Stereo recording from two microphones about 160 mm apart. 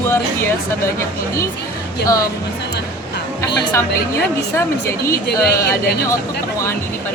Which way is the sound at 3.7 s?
15° left (ahead or behind).